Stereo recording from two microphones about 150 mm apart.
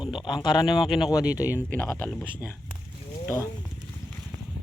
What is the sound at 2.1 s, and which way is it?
Speech, centre (ahead or behind).